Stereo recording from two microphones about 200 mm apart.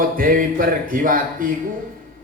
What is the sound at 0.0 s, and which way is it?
A man's voice, 45° right (ahead or behind).